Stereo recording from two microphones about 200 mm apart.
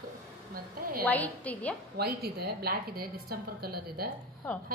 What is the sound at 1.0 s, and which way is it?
Speech, 10° left (ahead or behind).